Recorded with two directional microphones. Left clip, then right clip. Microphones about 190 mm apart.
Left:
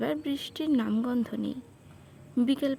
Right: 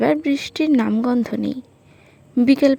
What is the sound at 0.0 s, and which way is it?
Speech, 35° right (ahead or behind).